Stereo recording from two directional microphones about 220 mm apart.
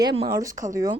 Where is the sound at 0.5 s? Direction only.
35° right (ahead or behind).